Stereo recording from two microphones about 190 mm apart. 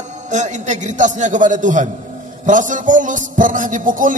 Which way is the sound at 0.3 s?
40° right (ahead or behind).